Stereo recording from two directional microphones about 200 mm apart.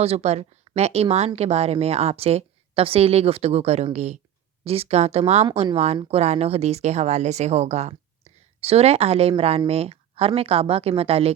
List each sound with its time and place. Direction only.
0.0 s speech: 30° right (ahead or behind)